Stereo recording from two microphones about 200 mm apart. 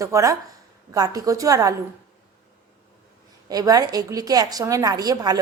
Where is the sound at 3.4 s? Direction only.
20° right (ahead or behind).